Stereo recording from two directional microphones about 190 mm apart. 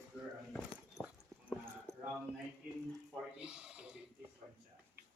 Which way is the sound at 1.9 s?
15° left (ahead or behind).